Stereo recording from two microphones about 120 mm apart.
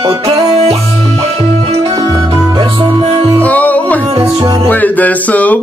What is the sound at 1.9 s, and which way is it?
Music, 30° right (ahead or behind).